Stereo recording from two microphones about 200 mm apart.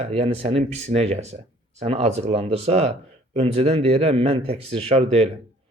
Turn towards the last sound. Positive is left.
turn(degrees=-30)  # may be behind; listen again after turning